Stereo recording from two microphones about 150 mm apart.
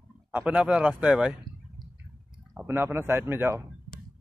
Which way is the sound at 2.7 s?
15° right (ahead or behind).